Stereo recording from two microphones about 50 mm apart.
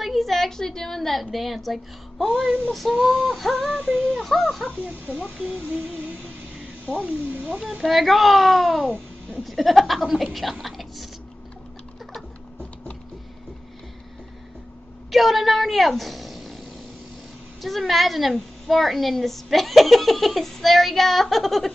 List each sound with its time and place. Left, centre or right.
0.0 s a woman's voice: centre
5.2 s speech: right
6.9 s speech: right
7.8 s a woman's voice: centre
8.8 s speech: right
9.4 s a woman's voice: centre
15.0 s speech: centre
17.6 s a woman's voice: centre